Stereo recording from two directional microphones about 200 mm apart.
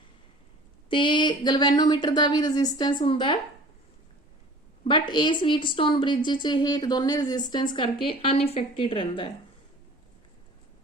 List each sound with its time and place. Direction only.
0.9 s speech: 25° left (ahead or behind)
5.1 s speech: 25° left (ahead or behind)